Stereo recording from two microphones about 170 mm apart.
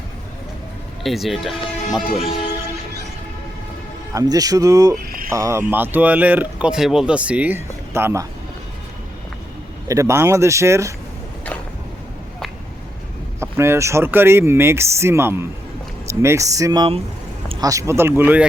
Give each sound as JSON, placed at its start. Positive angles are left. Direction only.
{"t": 1.0, "sound": "speech", "side_deg": 0}
{"t": 4.1, "sound": "speech", "side_deg": -20}
{"t": 5.0, "sound": "a sound", "side_deg": -60}
{"t": 5.3, "sound": "speech", "side_deg": -15}
{"t": 9.9, "sound": "speech", "side_deg": -15}
{"t": 13.4, "sound": "speech", "side_deg": -15}